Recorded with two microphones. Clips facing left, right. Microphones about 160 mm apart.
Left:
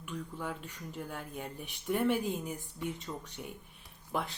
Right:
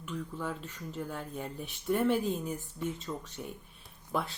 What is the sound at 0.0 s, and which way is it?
A woman's voice, 15° left (ahead or behind).